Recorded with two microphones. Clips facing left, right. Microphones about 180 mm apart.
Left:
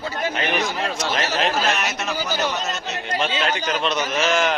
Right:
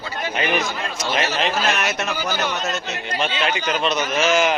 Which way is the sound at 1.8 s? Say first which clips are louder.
Right 2 dB; 55° right (ahead or behind).